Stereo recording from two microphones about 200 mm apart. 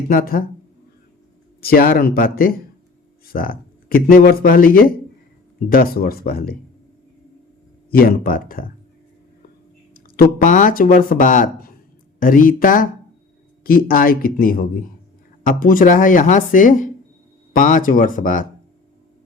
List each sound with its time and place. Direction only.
0.1 s speech: 45° left (ahead or behind)
1.6 s speech: 45° left (ahead or behind)
7.9 s speech: 50° left (ahead or behind)
9.9 s speech: 45° left (ahead or behind)